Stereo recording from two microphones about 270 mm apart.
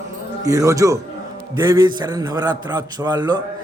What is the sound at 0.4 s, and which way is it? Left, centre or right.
A man's voice, centre.